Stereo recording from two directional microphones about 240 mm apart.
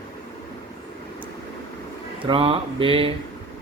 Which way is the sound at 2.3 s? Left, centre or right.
Right.